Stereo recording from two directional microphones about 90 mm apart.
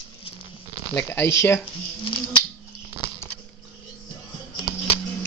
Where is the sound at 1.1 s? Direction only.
25° left (ahead or behind).